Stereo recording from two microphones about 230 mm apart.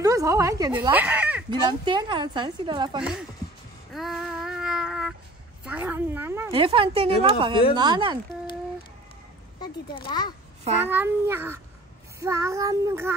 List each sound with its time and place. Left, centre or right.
0.0 s speech: centre
1.7 s a woman's voice: centre
3.0 s speech: centre
3.9 s child singing: centre
6.5 s a woman's voice: right
9.6 s a child's voice: centre
10.8 s child singing: centre